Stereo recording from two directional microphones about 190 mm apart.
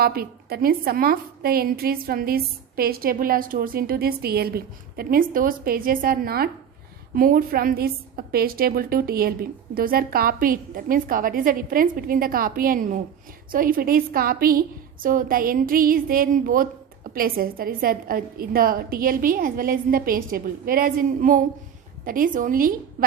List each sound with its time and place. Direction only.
0.0 s a woman's voice: 55° right (ahead or behind)